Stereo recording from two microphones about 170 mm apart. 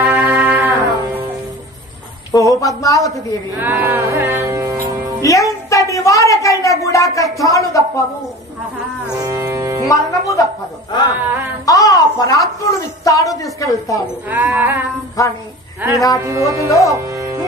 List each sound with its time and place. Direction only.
0.0 s music: 15° right (ahead or behind)
2.3 s a woman's voice: 20° left (ahead or behind)
3.5 s music: 10° right (ahead or behind)
5.2 s a sound: 20° left (ahead or behind)
7.4 s a woman's voice: 20° left (ahead or behind)
9.2 s music: 20° right (ahead or behind)
9.8 s a woman's voice: 20° left (ahead or behind)
11.1 s a sound: 10° right (ahead or behind)
11.6 s a sound: 20° left (ahead or behind)
13.0 s a woman's voice: 20° left (ahead or behind)
14.3 s music: 10° right (ahead or behind)
16.6 s a woman's voice: 20° left (ahead or behind)
16.9 s speech: 20° right (ahead or behind)